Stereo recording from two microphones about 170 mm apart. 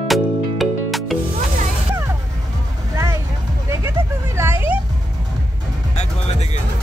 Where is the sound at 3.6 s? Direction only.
15° right (ahead or behind).